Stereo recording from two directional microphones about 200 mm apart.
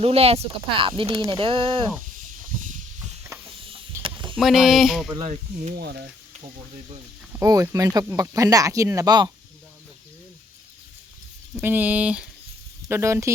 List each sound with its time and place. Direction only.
0.0 s speech: 30° right (ahead or behind)
4.0 s a sound: 25° right (ahead or behind)
4.4 s speech: centre (ahead or behind)
5.6 s speech: 50° right (ahead or behind)
7.3 s speech: 15° right (ahead or behind)
11.6 s speech: 10° right (ahead or behind)